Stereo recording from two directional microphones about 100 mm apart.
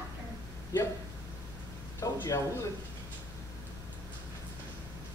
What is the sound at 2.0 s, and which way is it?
Speech, 35° left (ahead or behind).